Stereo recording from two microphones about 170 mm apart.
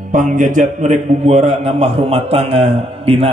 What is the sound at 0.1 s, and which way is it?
A man's voice, 50° right (ahead or behind).